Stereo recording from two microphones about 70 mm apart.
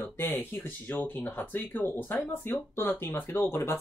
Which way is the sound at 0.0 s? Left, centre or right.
Left.